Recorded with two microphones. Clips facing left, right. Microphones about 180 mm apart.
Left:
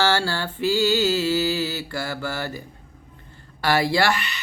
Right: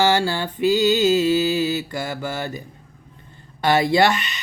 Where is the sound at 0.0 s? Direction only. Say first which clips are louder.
Right 3 dB; 15° right (ahead or behind).